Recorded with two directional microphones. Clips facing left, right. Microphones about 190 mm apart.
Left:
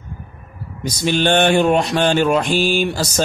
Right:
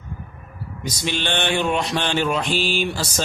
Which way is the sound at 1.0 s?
45° left (ahead or behind).